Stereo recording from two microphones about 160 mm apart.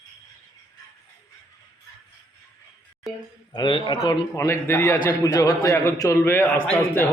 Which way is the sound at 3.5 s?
30° left (ahead or behind).